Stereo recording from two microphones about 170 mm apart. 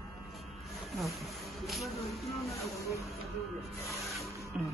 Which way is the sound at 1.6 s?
Centre (ahead or behind).